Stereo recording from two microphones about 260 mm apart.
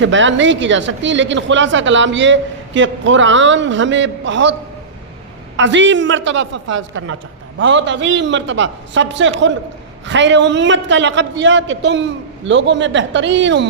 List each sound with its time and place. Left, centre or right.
0.0 s a woman's voice: right
5.5 s a woman's voice: right